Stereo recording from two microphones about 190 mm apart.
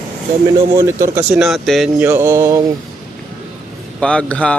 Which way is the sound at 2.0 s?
15° right (ahead or behind).